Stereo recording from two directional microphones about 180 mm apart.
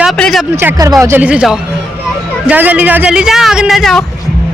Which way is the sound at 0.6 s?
15° right (ahead or behind).